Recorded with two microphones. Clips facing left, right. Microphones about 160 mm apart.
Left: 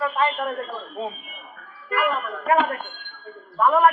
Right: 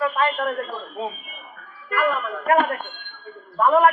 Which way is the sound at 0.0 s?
20° left (ahead or behind).